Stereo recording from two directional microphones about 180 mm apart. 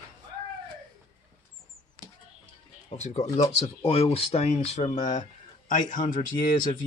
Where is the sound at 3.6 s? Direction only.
35° left (ahead or behind).